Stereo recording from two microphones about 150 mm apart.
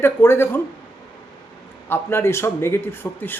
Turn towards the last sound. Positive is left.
turn(degrees=15)  # may be behind; listen again after turning